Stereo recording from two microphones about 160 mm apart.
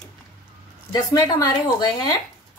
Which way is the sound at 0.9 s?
25° left (ahead or behind).